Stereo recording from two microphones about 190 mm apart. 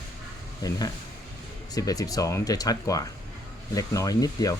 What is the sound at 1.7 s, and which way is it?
Speech, 20° left (ahead or behind).